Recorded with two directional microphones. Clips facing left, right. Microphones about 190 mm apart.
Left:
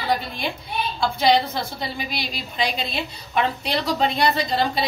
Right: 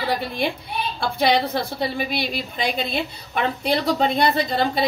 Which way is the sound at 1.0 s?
55° right (ahead or behind).